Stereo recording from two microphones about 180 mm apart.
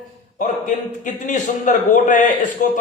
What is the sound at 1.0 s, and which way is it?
A man's voice, 45° left (ahead or behind).